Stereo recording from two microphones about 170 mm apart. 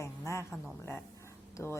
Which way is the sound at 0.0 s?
15° left (ahead or behind).